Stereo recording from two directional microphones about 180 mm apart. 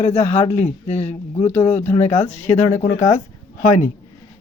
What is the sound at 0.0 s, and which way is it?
Speech, 35° left (ahead or behind).